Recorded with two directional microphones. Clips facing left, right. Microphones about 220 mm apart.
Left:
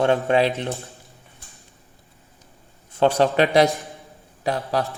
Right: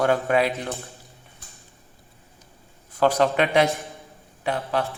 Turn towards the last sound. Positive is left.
turn(degrees=40)  # may be behind; listen again after turning